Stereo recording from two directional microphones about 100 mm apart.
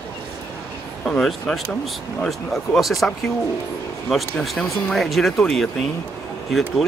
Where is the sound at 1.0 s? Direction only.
5° left (ahead or behind).